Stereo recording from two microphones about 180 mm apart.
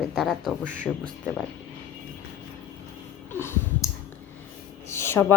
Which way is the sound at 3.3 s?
15° left (ahead or behind).